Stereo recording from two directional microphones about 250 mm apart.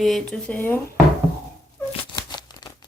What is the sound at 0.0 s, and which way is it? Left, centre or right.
Speech, centre.